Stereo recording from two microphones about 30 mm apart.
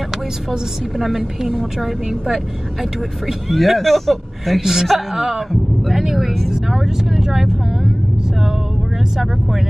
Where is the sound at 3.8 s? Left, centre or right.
Centre.